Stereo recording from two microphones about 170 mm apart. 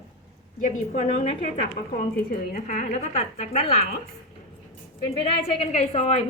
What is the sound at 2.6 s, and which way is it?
A woman's voice, 40° left (ahead or behind).